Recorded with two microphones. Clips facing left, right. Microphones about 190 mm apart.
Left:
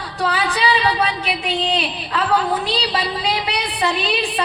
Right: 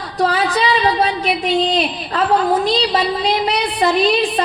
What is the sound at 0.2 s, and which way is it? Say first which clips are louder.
A woman's voice: right 4 dB; 35° right (ahead or behind).